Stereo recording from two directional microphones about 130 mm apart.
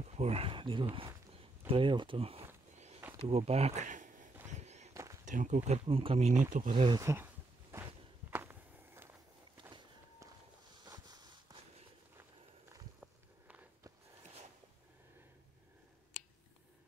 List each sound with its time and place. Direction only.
0.0 s a sound: 55° right (ahead or behind)
1.7 s speech: 40° right (ahead or behind); by 4.3 s 75° right (ahead or behind)
4.5 s walk: 60° right (ahead or behind)
5.2 s speech: 75° right (ahead or behind); by 6.4 s 55° right (ahead or behind)
6.7 s speech: 45° right (ahead or behind)
7.0 s speech: 25° right (ahead or behind)
8.3 s walk: 15° right (ahead or behind)
10.9 s a sound: 30° right (ahead or behind)
13.0 s a sound: 10° right (ahead or behind)